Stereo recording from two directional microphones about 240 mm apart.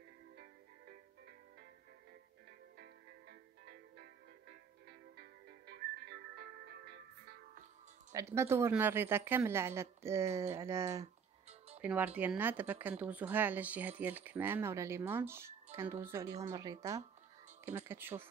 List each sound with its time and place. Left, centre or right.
2.8 s music: right
8.1 s speech: centre